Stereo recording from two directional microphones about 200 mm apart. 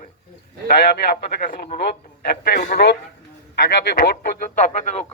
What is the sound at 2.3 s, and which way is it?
A man's voice, 50° left (ahead or behind).